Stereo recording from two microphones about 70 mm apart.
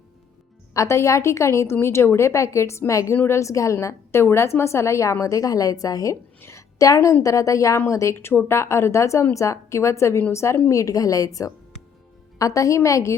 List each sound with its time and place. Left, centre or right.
0.7 s a woman's voice: left
6.4 s a woman's voice: left